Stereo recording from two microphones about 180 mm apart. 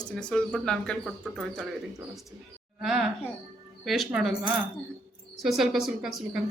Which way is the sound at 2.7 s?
Centre (ahead or behind).